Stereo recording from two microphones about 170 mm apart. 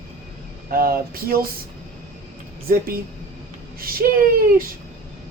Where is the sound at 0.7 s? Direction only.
60° right (ahead or behind).